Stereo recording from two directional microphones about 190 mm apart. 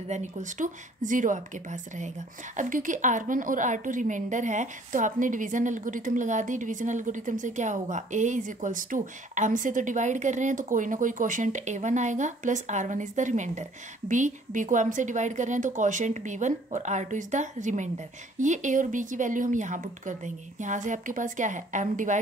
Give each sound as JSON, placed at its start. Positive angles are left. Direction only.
{"t": 0.1, "sound": "speech", "side_deg": -40}